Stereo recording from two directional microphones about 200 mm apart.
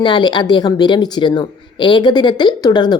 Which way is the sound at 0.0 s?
20° left (ahead or behind).